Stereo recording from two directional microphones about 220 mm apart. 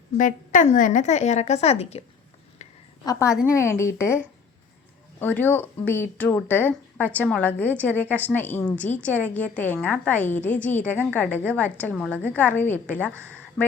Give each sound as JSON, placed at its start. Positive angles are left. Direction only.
{"t": 0.2, "sound": "a woman's voice", "side_deg": 35}
{"t": 3.0, "sound": "a woman's voice", "side_deg": 15}
{"t": 5.2, "sound": "speech", "side_deg": 10}